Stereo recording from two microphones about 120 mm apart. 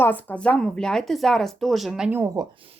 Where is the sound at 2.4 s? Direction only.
35° right (ahead or behind).